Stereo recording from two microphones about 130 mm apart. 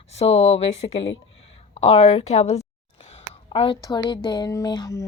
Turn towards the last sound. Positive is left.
turn(degrees=30)  # may be behind; listen again after turning